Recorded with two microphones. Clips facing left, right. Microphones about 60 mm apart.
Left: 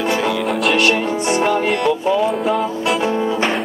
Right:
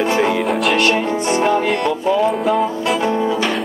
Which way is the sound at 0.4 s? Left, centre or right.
Centre.